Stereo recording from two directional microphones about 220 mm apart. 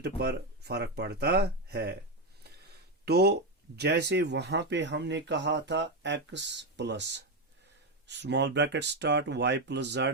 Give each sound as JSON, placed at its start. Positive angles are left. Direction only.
{"t": 0.0, "sound": "speech", "side_deg": -50}
{"t": 2.4, "sound": "a sound", "side_deg": -45}
{"t": 3.8, "sound": "speech", "side_deg": -50}